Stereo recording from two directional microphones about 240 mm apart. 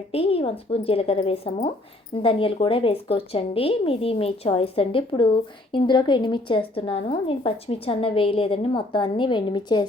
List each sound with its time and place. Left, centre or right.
0.1 s a woman's voice: left